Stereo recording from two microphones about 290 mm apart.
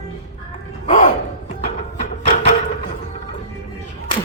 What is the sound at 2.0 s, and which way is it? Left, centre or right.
Music, left.